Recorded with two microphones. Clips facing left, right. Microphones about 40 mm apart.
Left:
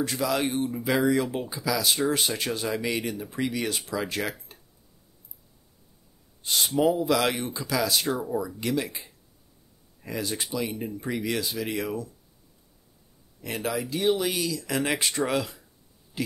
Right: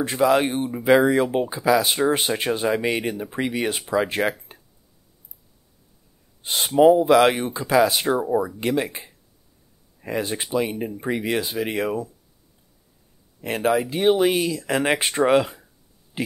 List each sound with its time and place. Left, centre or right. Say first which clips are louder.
0.0 s speech: right 7 dB; right
6.4 s speech: right 8 dB; right
13.4 s speech: right 9 dB; right